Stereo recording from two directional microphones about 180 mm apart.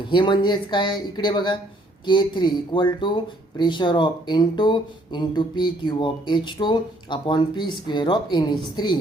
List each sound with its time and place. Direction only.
0.0 s speech: 25° left (ahead or behind)